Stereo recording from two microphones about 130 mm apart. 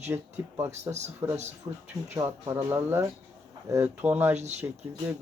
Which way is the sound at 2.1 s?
25° right (ahead or behind).